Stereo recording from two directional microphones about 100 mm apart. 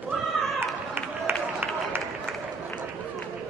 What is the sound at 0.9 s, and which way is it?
Run, 20° right (ahead or behind).